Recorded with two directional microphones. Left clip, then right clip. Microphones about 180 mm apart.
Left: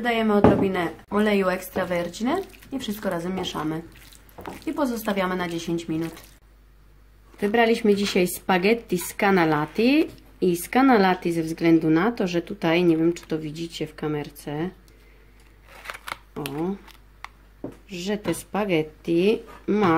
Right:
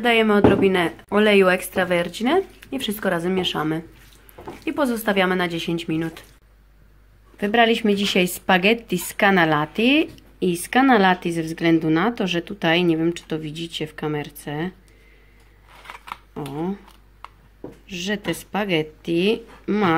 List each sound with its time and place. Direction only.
0.0 s speech: 15° right (ahead or behind)
7.3 s speech: 5° right (ahead or behind)
16.4 s speech: centre (ahead or behind)
17.8 s speech: centre (ahead or behind)